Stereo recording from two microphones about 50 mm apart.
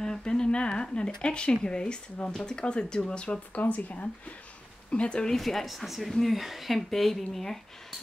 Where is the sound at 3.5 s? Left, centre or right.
Left.